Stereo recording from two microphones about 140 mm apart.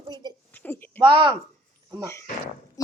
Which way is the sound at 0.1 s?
30° right (ahead or behind).